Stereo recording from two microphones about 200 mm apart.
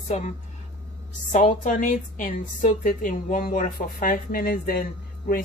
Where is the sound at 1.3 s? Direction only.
40° left (ahead or behind).